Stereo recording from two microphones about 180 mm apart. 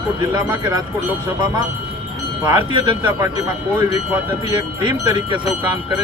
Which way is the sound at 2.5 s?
25° right (ahead or behind).